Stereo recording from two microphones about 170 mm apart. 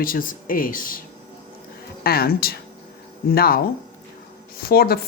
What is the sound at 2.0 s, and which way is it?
A woman's voice, 65° left (ahead or behind).